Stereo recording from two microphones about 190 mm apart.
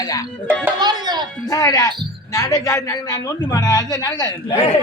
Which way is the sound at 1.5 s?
20° left (ahead or behind).